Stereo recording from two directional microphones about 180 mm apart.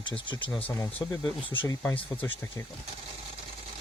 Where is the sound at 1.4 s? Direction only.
25° left (ahead or behind).